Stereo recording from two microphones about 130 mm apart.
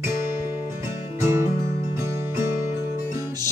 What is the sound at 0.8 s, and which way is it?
Music, 20° right (ahead or behind).